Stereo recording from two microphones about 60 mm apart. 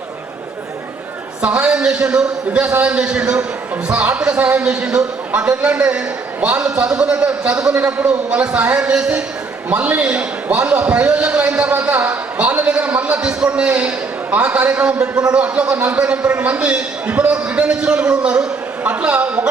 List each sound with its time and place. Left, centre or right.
1.4 s a man's voice: right